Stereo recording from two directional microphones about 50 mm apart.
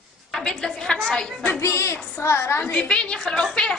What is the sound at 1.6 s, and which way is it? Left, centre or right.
A woman's voice, left.